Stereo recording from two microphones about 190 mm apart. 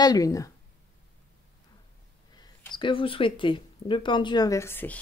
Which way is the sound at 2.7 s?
25° left (ahead or behind).